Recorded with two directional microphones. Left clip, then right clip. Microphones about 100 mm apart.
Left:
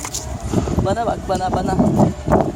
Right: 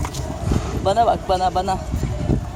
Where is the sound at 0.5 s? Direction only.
25° left (ahead or behind).